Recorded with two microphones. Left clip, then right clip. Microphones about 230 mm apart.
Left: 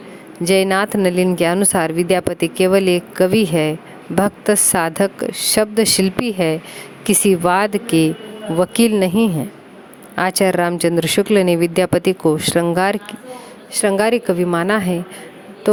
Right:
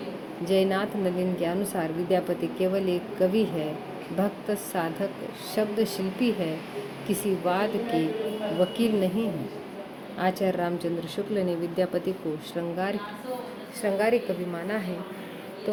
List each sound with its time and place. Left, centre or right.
0.4 s speech: left